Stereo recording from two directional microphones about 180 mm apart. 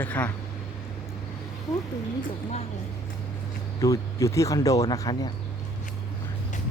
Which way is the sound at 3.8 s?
20° left (ahead or behind).